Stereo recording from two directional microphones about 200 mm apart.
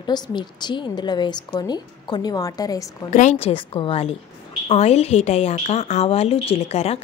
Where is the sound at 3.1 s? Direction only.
35° left (ahead or behind).